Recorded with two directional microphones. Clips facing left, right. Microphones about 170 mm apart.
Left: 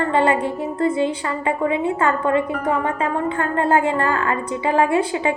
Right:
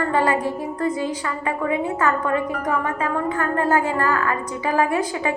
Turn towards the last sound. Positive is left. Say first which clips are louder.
# left 3 dB
turn(degrees=25)  # may be behind; listen again after turning